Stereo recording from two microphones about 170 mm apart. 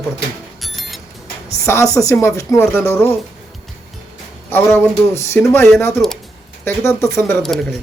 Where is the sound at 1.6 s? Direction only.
15° left (ahead or behind).